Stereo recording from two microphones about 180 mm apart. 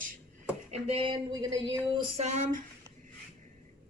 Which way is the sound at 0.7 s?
35° right (ahead or behind).